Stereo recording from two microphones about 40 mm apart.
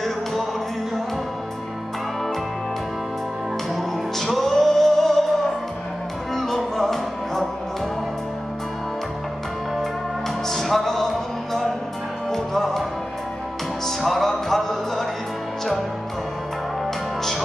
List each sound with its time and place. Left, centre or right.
3.7 s music: centre
6.3 s music: centre
10.5 s music: centre
12.3 s music: centre
13.8 s music: centre